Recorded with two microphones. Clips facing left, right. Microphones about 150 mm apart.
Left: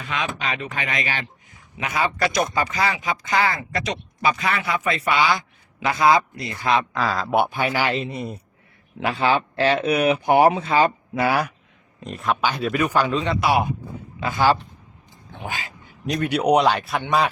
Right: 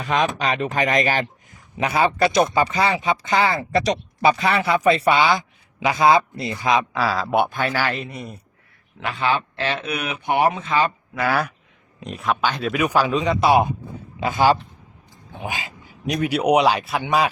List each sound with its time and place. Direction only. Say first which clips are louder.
0.0 s speech: right 6 dB; 40° right (ahead or behind); by 6.5 s 25° right (ahead or behind)
6.5 s speech: right 1 dB; 15° right (ahead or behind); by 11.3 s 25° left (ahead or behind)
11.9 s speech: right 1 dB; centre (ahead or behind)
12.8 s a man's voice: right 2 dB; 10° right (ahead or behind)
13.4 s a man's voice: right 4 dB; 25° right (ahead or behind)
16.0 s a man's voice: even; centre (ahead or behind)